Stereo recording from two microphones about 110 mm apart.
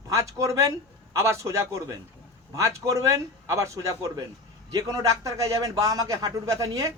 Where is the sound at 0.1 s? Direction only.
30° right (ahead or behind).